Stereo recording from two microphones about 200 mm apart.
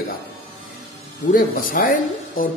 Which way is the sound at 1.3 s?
45° left (ahead or behind).